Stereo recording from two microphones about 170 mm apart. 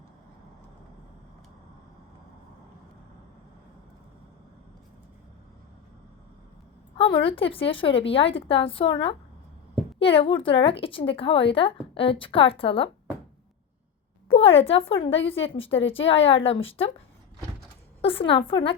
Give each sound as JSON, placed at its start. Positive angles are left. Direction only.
{"t": 6.9, "sound": "a woman's voice", "side_deg": 30}
{"t": 14.3, "sound": "a woman's voice", "side_deg": 35}
{"t": 18.0, "sound": "a woman's voice", "side_deg": 30}